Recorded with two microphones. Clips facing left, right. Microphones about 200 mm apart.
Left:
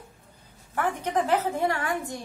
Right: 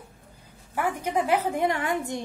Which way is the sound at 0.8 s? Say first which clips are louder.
Even; 10° right (ahead or behind).